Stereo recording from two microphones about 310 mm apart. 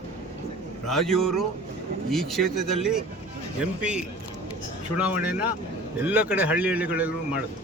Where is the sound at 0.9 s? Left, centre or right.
Centre.